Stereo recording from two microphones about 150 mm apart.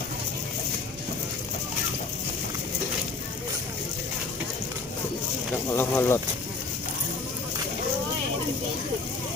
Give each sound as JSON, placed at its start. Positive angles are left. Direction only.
{"t": 5.7, "sound": "speech", "side_deg": 15}